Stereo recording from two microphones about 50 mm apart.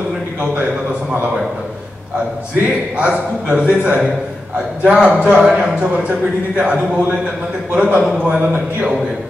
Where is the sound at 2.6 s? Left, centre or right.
Right.